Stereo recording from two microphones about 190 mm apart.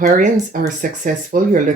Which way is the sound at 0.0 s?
40° right (ahead or behind).